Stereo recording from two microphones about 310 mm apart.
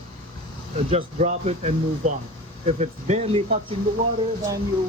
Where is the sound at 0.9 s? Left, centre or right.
Right.